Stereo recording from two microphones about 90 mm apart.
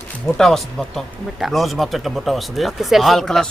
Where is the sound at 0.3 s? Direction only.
5° left (ahead or behind).